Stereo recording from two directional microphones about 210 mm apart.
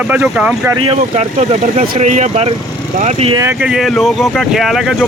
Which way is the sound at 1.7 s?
40° right (ahead or behind).